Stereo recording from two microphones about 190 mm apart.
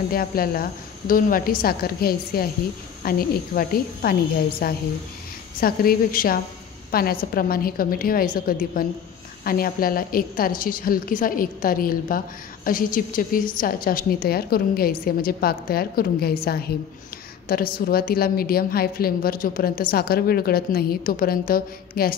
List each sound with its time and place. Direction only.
0.1 s a woman's voice: 50° left (ahead or behind)